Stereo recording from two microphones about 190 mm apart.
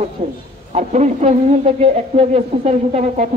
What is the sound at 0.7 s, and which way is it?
A man's voice, 35° right (ahead or behind).